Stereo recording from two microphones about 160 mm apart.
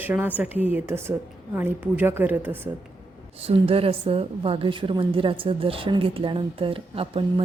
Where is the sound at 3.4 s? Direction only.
35° right (ahead or behind).